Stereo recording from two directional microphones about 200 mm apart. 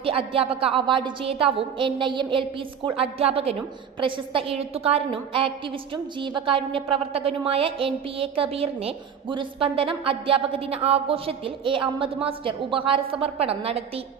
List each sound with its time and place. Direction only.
0.0 s a woman's voice: 30° right (ahead or behind)